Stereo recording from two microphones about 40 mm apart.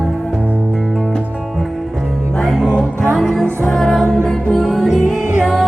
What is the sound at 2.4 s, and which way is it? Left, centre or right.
Music, centre.